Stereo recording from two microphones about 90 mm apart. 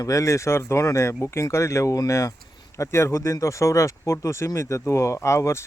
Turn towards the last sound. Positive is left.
turn(degrees=30)  # may be behind; listen again after turning